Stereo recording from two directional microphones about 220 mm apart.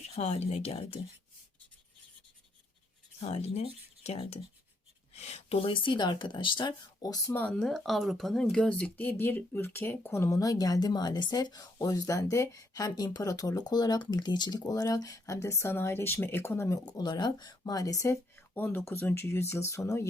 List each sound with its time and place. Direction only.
0.2 s speech: 30° left (ahead or behind)
3.2 s speech: 30° left (ahead or behind)